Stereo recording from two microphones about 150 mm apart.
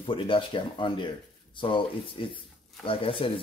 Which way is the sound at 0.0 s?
35° left (ahead or behind).